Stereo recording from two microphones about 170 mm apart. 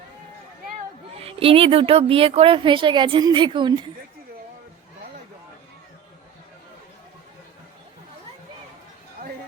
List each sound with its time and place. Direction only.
1.1 s speech: 35° right (ahead or behind)